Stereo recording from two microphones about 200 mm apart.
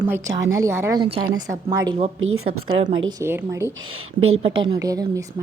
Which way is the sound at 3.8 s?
90° right.